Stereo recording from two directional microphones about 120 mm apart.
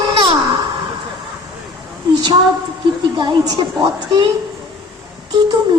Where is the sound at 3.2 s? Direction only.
40° right (ahead or behind).